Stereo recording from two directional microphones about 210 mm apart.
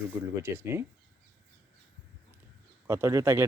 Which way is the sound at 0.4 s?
10° right (ahead or behind).